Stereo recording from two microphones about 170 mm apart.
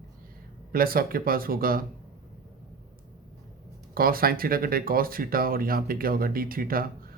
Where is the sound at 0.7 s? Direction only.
60° right (ahead or behind).